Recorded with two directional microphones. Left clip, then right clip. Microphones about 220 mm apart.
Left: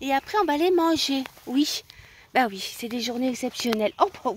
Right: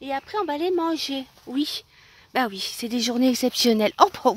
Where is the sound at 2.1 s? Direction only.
Centre (ahead or behind).